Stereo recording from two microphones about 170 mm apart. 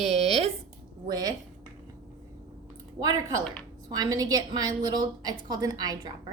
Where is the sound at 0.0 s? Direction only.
40° right (ahead or behind).